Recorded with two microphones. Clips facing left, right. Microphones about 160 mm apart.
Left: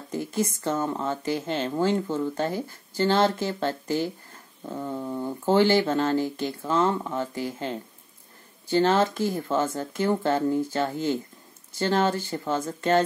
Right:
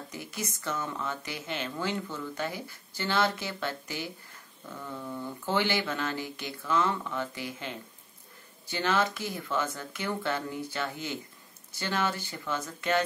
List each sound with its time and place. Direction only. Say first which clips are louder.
0.1 s speech: left 14 dB; 50° left (ahead or behind)
4.6 s speech: left 8 dB; 35° left (ahead or behind)